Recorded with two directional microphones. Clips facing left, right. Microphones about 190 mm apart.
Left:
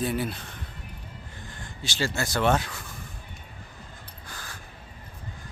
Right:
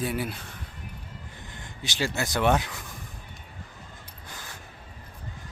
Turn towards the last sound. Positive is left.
turn(degrees=-20)  # may be behind; listen again after turning